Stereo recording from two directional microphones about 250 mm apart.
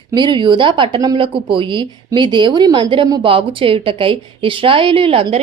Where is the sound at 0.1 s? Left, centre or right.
Centre.